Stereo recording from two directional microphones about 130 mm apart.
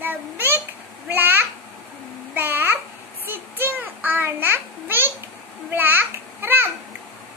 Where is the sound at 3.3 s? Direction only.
15° right (ahead or behind).